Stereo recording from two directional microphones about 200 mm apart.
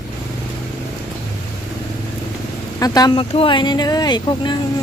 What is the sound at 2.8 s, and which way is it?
Speech, 20° left (ahead or behind).